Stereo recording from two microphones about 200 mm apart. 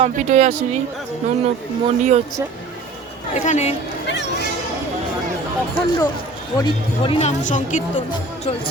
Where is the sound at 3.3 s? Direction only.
35° left (ahead or behind).